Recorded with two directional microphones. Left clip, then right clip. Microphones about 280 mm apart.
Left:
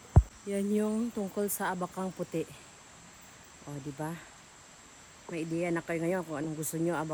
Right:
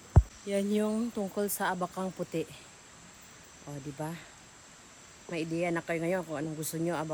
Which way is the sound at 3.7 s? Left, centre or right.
Centre.